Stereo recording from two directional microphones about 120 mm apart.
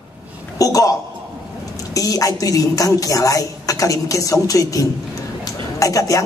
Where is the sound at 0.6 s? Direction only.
30° left (ahead or behind).